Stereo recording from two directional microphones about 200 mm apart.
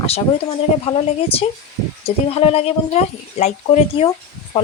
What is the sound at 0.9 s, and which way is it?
Speech, 30° left (ahead or behind).